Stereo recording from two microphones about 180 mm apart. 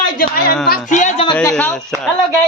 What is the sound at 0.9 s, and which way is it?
Speech, 40° left (ahead or behind).